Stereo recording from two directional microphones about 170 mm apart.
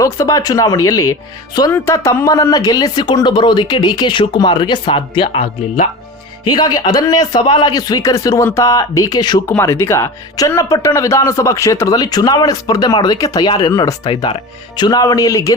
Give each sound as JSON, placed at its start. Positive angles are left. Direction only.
{"t": 0.0, "sound": "speech", "side_deg": 20}